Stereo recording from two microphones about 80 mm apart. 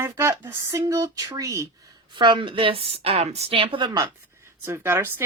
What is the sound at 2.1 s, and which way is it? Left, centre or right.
A woman's voice, right.